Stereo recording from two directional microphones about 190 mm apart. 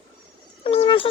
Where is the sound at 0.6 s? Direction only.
30° left (ahead or behind).